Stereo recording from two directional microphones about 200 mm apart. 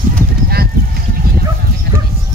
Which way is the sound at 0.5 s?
50° right (ahead or behind).